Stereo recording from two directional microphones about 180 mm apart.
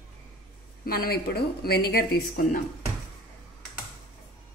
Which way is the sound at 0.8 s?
55° left (ahead or behind).